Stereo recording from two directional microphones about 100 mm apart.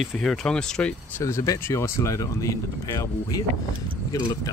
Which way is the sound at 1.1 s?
30° left (ahead or behind).